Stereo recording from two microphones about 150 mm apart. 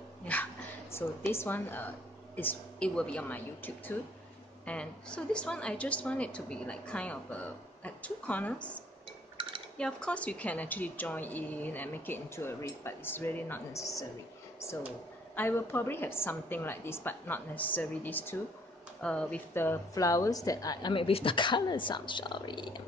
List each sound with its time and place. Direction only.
0.2 s dog: 10° left (ahead or behind)
0.9 s a woman's voice: 15° left (ahead or behind)
15.3 s a woman's voice: 15° left (ahead or behind); by 22.8 s 30° left (ahead or behind)